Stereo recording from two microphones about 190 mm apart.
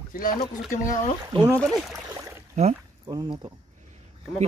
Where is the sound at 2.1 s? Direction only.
15° right (ahead or behind).